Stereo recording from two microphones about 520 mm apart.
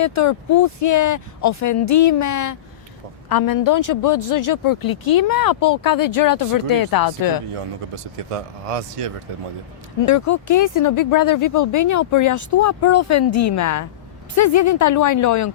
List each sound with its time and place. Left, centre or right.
0.0 s a man's voice: left
7.5 s speech: right
10.1 s a man's voice: left